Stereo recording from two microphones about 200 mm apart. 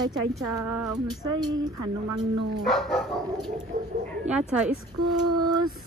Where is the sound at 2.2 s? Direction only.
Centre (ahead or behind).